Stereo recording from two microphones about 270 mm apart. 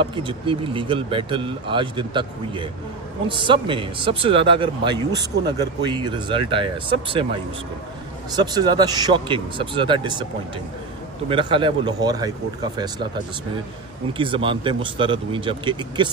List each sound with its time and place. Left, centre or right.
0.0 s a man's voice: centre
8.5 s a man's voice: centre
11.2 s a man's voice: centre
14.1 s speech: centre